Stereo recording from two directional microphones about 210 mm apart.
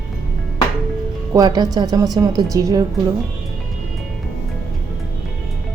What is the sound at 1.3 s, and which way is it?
A woman's voice, 20° right (ahead or behind).